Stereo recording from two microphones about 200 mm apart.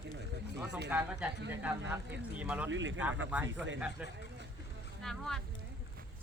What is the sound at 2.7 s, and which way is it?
Speech, 70° right (ahead or behind).